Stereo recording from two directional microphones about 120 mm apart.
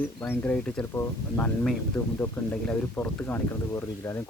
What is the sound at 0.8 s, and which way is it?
Speech, 20° left (ahead or behind).